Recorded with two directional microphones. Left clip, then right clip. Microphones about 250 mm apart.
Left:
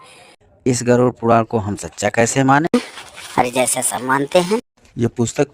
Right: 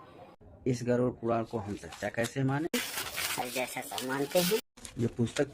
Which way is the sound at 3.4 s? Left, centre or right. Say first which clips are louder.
Left 18 dB; left.